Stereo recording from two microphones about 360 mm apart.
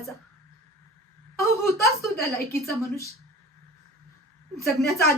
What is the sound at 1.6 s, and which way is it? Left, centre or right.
Speech, left.